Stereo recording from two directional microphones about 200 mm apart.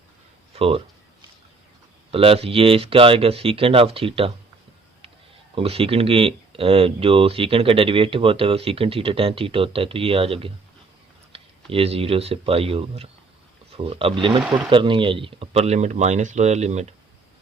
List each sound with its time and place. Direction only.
0.5 s speech: 30° right (ahead or behind)
2.0 s speech: 30° right (ahead or behind)
5.5 s speech: 30° right (ahead or behind)